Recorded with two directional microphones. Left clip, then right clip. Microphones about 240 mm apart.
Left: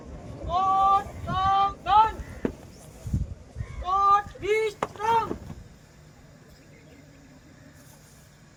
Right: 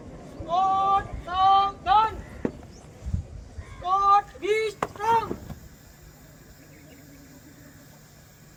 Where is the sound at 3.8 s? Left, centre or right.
Centre.